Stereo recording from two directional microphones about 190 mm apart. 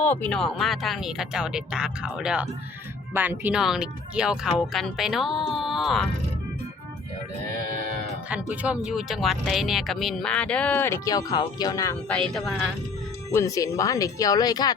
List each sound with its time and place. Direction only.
0.0 s speech: 10° left (ahead or behind)
8.3 s speech: 5° right (ahead or behind); by 11.9 s 15° left (ahead or behind)
12.0 s speech: 5° left (ahead or behind)
13.3 s speech: 15° left (ahead or behind)